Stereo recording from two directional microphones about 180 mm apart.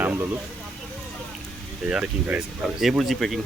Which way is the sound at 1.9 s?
5° right (ahead or behind).